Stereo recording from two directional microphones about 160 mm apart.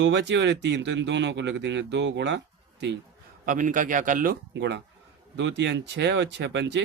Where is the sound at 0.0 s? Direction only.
90° right.